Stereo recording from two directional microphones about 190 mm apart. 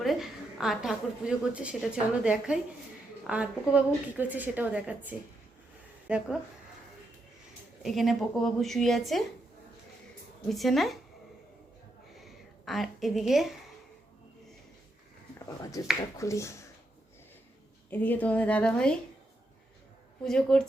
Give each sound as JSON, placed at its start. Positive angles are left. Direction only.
{"t": 0.0, "sound": "a woman's voice", "side_deg": 0}
{"t": 7.8, "sound": "a woman's voice", "side_deg": 0}
{"t": 10.5, "sound": "a woman's voice", "side_deg": 0}
{"t": 12.1, "sound": "a sound", "side_deg": 0}
{"t": 15.4, "sound": "a woman's voice", "side_deg": 20}
{"t": 17.9, "sound": "a woman's voice", "side_deg": 10}
{"t": 20.2, "sound": "a woman's voice", "side_deg": 5}